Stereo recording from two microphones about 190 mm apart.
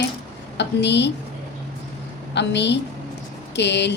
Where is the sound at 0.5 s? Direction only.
65° left (ahead or behind).